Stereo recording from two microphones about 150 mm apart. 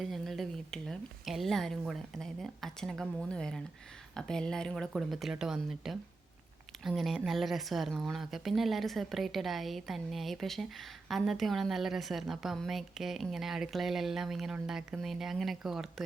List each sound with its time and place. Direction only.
0.0 s a woman's voice: centre (ahead or behind)